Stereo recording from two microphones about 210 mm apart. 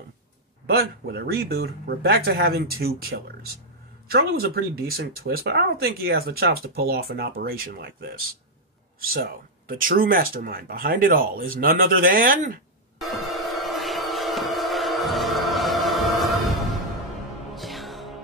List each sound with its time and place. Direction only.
0.7 s speech: 50° right (ahead or behind)
13.0 s music: centre (ahead or behind)